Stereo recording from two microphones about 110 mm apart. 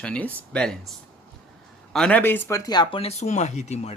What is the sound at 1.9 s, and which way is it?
Speech, 10° left (ahead or behind).